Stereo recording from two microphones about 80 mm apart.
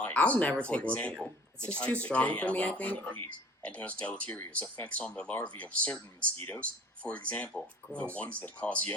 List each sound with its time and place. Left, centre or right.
0.0 s speech: centre